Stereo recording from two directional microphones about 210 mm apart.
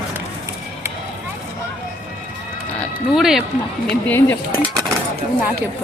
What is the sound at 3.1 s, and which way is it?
Music, centre (ahead or behind).